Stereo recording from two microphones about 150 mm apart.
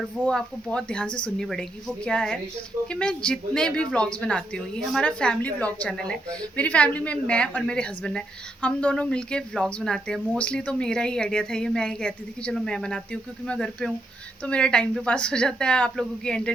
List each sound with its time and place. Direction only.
0.3 s a woman's voice: 5° left (ahead or behind)